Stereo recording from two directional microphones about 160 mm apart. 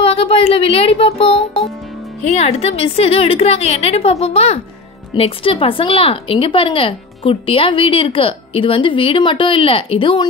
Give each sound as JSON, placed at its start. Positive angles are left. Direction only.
{"t": 0.0, "sound": "a woman's voice", "side_deg": 35}